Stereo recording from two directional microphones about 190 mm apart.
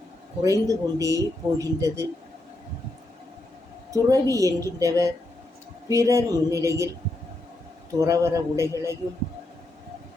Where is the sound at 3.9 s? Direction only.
15° right (ahead or behind).